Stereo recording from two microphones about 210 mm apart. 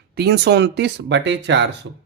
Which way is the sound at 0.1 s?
50° right (ahead or behind).